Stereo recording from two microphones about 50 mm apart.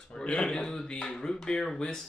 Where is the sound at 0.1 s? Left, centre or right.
Left.